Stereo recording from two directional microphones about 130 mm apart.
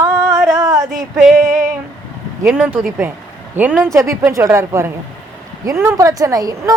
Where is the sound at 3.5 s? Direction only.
15° right (ahead or behind).